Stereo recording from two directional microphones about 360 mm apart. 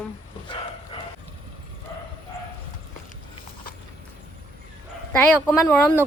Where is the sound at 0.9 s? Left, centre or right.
Centre.